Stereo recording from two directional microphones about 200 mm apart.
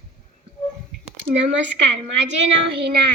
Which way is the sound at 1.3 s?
65° right (ahead or behind).